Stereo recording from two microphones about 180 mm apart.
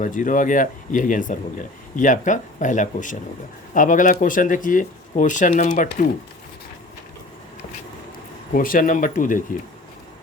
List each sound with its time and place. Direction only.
0.0 s speech: 45° left (ahead or behind)
8.5 s speech: 50° left (ahead or behind)